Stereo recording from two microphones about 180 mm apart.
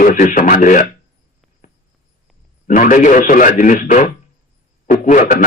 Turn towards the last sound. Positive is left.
turn(degrees=45)  # may be behind; listen again after turning